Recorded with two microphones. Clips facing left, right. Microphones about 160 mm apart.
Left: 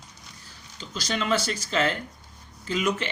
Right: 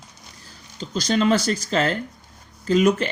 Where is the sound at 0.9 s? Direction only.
40° right (ahead or behind).